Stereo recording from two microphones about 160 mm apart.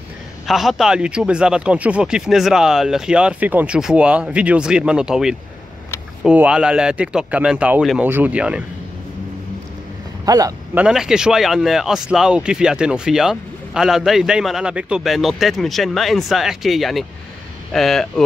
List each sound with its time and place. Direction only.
0.5 s speech: centre (ahead or behind)
10.2 s speech: 25° right (ahead or behind)
10.7 s speech: 5° right (ahead or behind)